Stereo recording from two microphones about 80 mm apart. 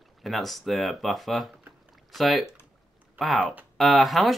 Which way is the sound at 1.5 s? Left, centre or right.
Centre.